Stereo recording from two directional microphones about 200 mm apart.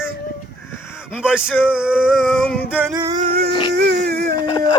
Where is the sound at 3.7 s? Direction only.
55° right (ahead or behind).